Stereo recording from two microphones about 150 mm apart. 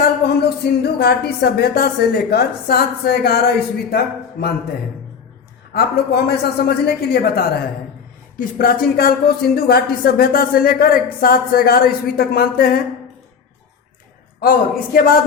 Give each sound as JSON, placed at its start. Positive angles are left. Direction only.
{"t": 0.0, "sound": "speech", "side_deg": 90}
{"t": 5.7, "sound": "speech", "side_deg": 90}
{"t": 8.4, "sound": "speech", "side_deg": 70}
{"t": 14.4, "sound": "a man's voice", "side_deg": 70}